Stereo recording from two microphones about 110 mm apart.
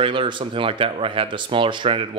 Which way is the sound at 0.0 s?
50° right (ahead or behind).